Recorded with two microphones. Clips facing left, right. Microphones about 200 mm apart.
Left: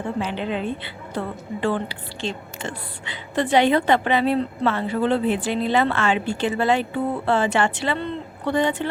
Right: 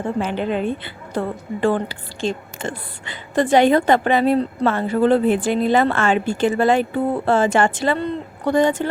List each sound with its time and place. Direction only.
0.2 s a woman's voice: 50° right (ahead or behind)